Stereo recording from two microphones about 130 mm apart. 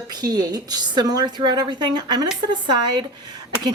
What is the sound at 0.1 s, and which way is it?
Speech, 30° right (ahead or behind).